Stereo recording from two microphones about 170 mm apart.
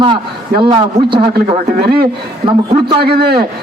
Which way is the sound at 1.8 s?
65° right (ahead or behind).